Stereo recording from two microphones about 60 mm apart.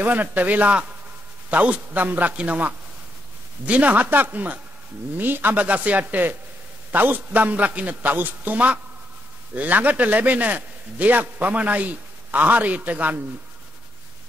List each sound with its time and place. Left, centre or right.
0.0 s a man's voice: right